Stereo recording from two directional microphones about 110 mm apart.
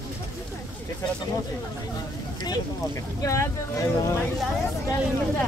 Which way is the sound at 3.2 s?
30° left (ahead or behind).